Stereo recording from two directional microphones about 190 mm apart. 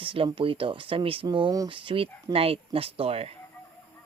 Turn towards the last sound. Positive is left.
turn(degrees=-30)  # may be behind; listen again after turning